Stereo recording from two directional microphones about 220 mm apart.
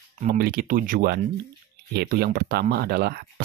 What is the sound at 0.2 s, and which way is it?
Speech, 40° right (ahead or behind).